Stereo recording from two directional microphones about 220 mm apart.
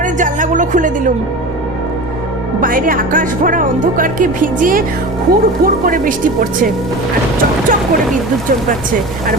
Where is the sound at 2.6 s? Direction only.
40° right (ahead or behind).